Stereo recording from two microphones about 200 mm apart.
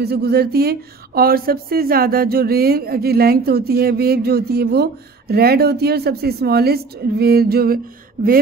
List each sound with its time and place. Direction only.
0.0 s speech: 55° right (ahead or behind)